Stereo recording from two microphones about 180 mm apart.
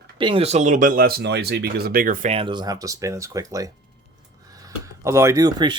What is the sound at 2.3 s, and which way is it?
Speech, 25° right (ahead or behind).